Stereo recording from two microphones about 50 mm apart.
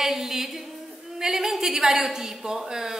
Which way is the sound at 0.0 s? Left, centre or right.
Centre.